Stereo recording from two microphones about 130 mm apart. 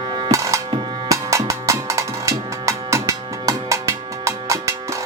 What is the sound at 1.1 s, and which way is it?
Drum, 25° right (ahead or behind).